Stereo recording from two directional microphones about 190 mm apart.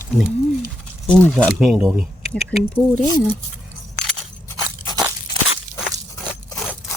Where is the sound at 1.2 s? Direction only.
5° left (ahead or behind).